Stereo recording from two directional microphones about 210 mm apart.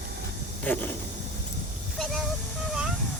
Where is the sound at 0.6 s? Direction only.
10° left (ahead or behind).